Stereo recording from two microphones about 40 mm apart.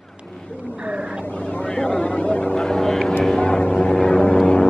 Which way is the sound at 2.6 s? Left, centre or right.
Centre.